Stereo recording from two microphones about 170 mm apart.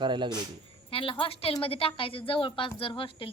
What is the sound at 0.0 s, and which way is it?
Speech, 25° right (ahead or behind).